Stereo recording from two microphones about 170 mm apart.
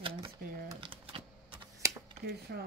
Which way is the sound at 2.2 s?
75° right (ahead or behind).